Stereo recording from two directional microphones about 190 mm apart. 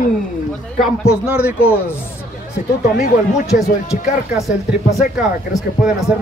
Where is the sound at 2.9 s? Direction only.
55° left (ahead or behind).